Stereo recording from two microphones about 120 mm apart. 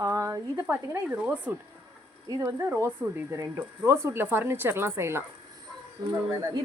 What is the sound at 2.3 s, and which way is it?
Speech, 25° right (ahead or behind).